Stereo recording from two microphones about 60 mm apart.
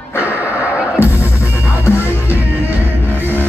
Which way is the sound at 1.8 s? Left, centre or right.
Left.